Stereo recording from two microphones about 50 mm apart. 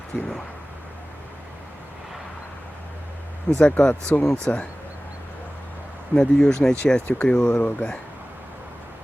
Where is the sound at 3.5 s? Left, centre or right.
Left.